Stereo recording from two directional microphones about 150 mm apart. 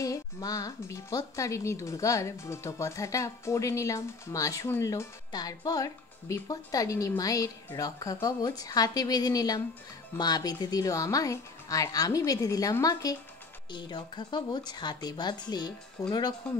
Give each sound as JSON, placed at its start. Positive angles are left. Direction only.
{"t": 0.0, "sound": "speech", "side_deg": 25}